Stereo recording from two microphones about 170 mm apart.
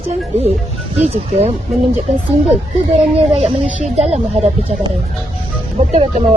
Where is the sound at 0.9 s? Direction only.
40° right (ahead or behind).